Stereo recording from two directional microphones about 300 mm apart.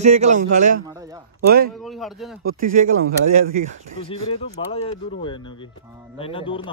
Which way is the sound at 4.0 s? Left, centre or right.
Centre.